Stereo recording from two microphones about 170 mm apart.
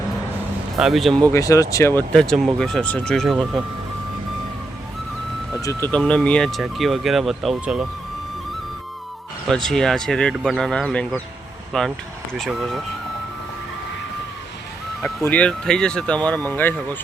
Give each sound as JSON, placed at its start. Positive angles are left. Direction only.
{"t": 0.8, "sound": "speech", "side_deg": 0}
{"t": 1.3, "sound": "speech", "side_deg": 20}
{"t": 5.6, "sound": "speech", "side_deg": 15}
{"t": 9.6, "sound": "speech", "side_deg": 0}
{"t": 15.0, "sound": "speech", "side_deg": 10}